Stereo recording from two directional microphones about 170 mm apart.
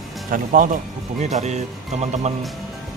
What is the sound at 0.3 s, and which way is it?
Speech, 50° right (ahead or behind).